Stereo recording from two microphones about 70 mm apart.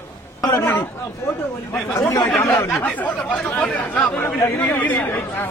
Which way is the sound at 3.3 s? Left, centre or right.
Centre.